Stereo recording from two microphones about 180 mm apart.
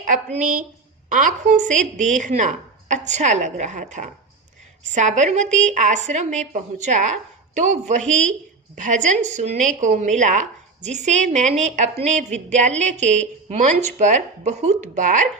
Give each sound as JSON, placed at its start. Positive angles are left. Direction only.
{"t": 0.0, "sound": "a woman's voice", "side_deg": -45}